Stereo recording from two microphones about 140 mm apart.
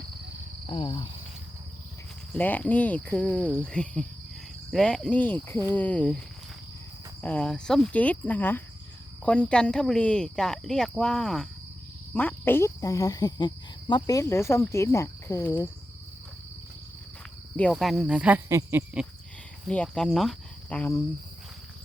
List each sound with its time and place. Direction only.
0.7 s speech: 35° left (ahead or behind)
2.3 s cricket: 10° left (ahead or behind)
9.2 s speech: 10° left (ahead or behind)
12.1 s speech: 15° left (ahead or behind); by 14.2 s 35° left (ahead or behind)
14.2 s speech: 20° left (ahead or behind)
17.6 s speech: centre (ahead or behind)
18.4 s a sound: 20° right (ahead or behind)
19.6 s speech: 5° left (ahead or behind)